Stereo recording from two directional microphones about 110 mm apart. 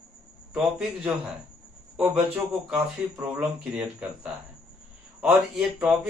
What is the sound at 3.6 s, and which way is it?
A man's voice, 15° right (ahead or behind).